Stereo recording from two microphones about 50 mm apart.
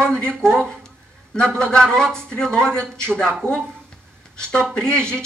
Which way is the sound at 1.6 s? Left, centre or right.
Centre.